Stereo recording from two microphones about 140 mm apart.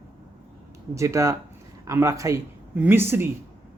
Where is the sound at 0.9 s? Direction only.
20° right (ahead or behind).